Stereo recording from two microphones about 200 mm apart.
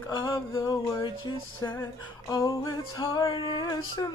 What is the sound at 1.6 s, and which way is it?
Female singing, 20° left (ahead or behind).